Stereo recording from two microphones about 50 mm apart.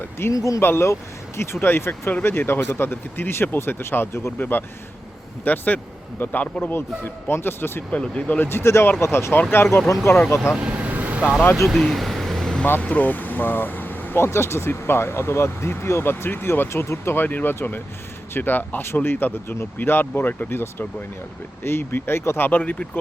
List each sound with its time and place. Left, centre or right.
0.0 s speech: left
4.3 s speech: left
7.9 s speech: left
8.4 s speech: left
9.9 s speech: left
10.2 s speech: left
10.6 s vehicle: right
11.5 s vehicle: centre
12.8 s speech: left
14.2 s speech: left
17.2 s speech: left
22.4 s speech: left